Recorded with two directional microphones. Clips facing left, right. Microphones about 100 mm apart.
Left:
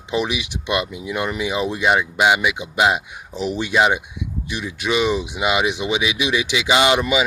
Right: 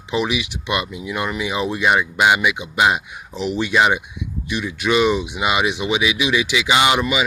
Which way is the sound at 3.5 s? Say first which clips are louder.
Right 1 dB; 20° left (ahead or behind).